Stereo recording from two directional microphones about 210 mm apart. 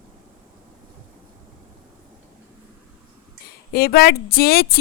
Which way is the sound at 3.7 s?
50° left (ahead or behind).